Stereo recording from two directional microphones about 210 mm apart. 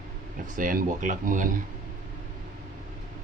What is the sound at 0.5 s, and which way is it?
Speech, 40° right (ahead or behind).